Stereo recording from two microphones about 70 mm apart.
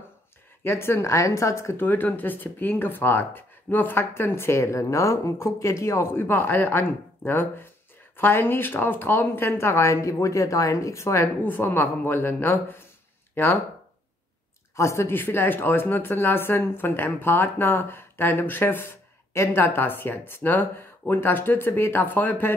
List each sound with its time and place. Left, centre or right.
0.7 s speech: left
1.8 s speech: left
6.1 s speech: left
11.4 s speech: left
14.8 s speech: left